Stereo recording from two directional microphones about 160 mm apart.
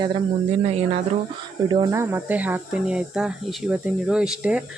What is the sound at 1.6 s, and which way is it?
Speech, 30° right (ahead or behind).